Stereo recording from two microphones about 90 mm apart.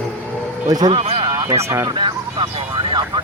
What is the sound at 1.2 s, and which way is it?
Speech, 45° right (ahead or behind).